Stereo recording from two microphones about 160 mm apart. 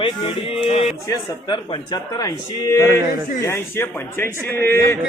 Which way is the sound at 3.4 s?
15° left (ahead or behind).